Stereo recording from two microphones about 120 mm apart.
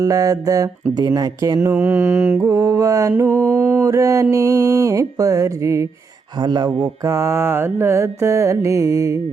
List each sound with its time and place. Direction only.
0.0 s speech: 30° right (ahead or behind); by 3.8 s 15° right (ahead or behind)
3.8 s speech: 25° right (ahead or behind)
6.4 s speech: 35° right (ahead or behind)